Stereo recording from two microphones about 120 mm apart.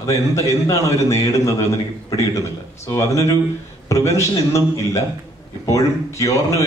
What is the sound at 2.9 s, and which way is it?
A man's voice, 25° left (ahead or behind).